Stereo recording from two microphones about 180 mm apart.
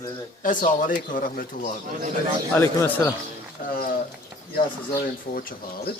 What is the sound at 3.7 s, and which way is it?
Speech, 55° left (ahead or behind).